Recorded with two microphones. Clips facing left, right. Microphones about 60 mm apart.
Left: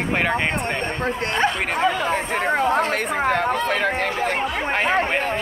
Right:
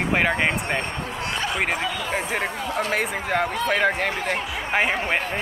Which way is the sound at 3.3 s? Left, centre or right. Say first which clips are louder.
Left 2 dB; centre.